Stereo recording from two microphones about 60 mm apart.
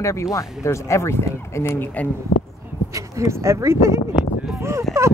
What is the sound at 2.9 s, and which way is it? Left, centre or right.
Speech, right.